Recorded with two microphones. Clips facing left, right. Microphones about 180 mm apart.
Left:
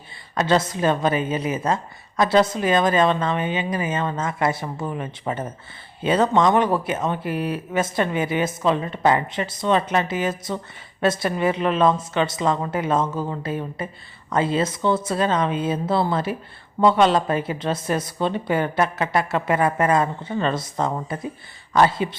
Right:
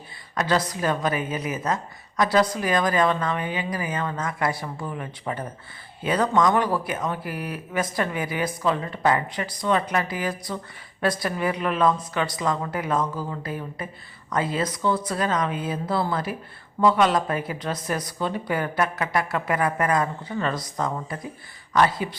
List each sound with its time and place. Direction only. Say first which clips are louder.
0.3 s a woman's voice: left 4 dB; 25° left (ahead or behind)